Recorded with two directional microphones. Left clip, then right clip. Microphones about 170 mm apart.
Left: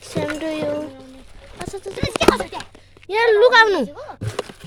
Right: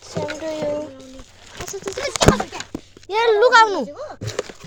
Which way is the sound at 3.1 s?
25° left (ahead or behind).